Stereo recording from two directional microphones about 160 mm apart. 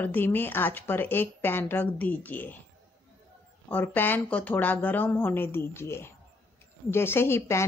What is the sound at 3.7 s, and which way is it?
A woman's voice, 10° left (ahead or behind).